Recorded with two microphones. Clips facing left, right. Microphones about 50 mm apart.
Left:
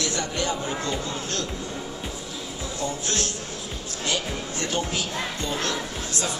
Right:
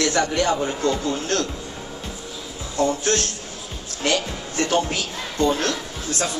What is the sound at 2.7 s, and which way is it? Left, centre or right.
Speech, right.